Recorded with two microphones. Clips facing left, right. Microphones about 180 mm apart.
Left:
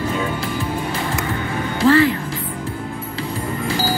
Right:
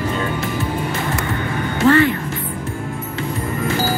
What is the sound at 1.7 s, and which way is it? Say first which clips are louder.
Speech: even; 30° left (ahead or behind).